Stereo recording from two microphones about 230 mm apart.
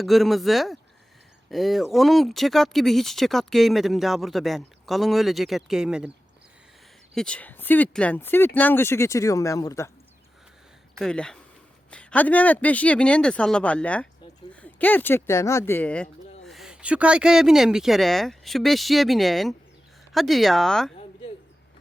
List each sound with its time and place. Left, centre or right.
0.0 s speech: centre
7.2 s speech: centre
11.0 s speech: centre